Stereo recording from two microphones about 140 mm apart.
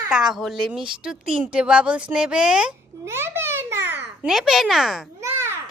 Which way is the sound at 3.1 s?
20° right (ahead or behind).